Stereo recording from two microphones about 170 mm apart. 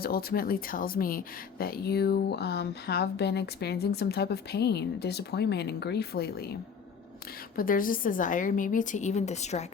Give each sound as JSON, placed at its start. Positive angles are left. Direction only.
{"t": 0.0, "sound": "speech", "side_deg": 60}
{"t": 7.5, "sound": "a woman's voice", "side_deg": 55}